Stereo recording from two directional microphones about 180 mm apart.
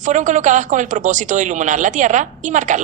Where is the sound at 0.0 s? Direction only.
45° right (ahead or behind).